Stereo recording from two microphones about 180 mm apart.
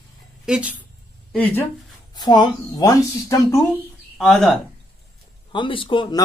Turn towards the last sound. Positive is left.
turn(degrees=25)  # may be behind; listen again after turning